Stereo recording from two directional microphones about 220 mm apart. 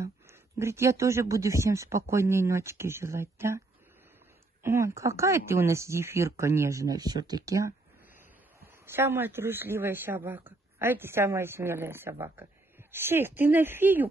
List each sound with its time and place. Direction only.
0.0 s speech: 10° right (ahead or behind)
4.6 s speech: 15° right (ahead or behind)
8.8 s speech: 10° right (ahead or behind)